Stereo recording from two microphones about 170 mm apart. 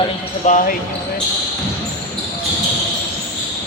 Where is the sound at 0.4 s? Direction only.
45° left (ahead or behind).